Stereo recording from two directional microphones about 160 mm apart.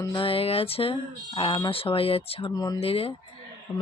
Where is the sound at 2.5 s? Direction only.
25° left (ahead or behind).